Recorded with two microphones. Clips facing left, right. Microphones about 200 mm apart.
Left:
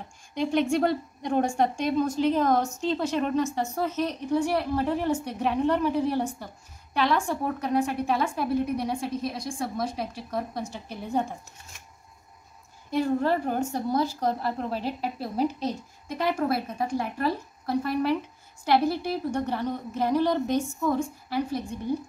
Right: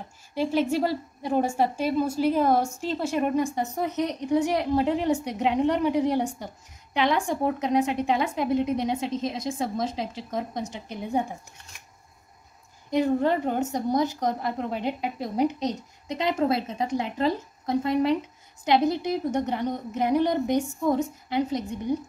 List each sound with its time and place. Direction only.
0.3 s a woman's voice: 5° right (ahead or behind)
12.9 s a woman's voice: 20° right (ahead or behind)